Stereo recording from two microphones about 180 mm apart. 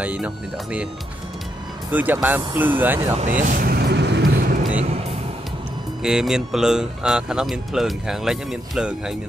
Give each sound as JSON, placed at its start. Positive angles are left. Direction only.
{"t": 0.0, "sound": "speech", "side_deg": -10}
{"t": 1.9, "sound": "speech", "side_deg": -10}
{"t": 3.2, "sound": "vehicle", "side_deg": -45}
{"t": 6.0, "sound": "speech", "side_deg": -5}